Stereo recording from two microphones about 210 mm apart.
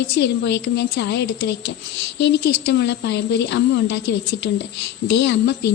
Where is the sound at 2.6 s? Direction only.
55° left (ahead or behind).